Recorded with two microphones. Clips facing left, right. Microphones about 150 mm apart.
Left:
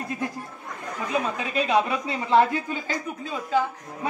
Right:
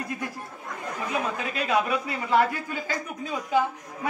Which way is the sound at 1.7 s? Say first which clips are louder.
Left 1 dB; 25° left (ahead or behind).